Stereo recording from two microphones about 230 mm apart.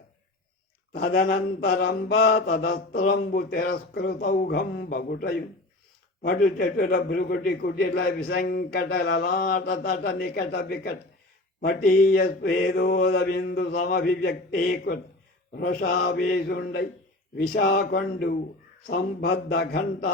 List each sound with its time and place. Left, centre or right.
0.9 s mantra: left
2.9 s a man's voice: left
15.5 s mantra: left
17.3 s a man's voice: left
17.6 s mantra: left